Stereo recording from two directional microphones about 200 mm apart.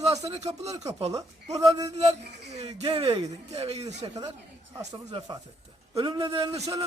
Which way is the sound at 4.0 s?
20° right (ahead or behind).